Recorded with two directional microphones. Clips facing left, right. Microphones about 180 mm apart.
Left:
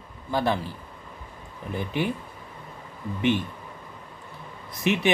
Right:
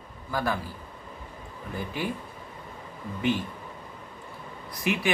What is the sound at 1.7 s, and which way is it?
Speech, 20° left (ahead or behind).